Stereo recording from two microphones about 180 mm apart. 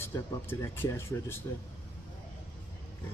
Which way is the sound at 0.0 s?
15° left (ahead or behind).